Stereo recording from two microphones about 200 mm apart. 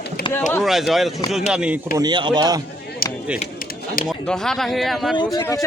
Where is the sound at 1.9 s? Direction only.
20° right (ahead or behind).